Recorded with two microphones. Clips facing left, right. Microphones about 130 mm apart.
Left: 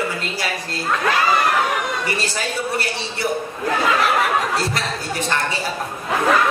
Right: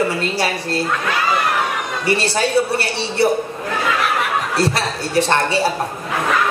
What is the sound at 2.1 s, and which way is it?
Speech, 70° right (ahead or behind).